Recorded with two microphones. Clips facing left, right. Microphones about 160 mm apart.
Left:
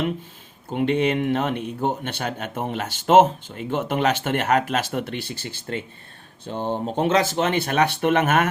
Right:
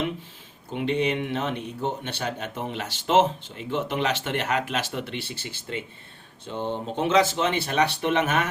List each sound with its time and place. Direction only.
0.7 s speech: 50° left (ahead or behind)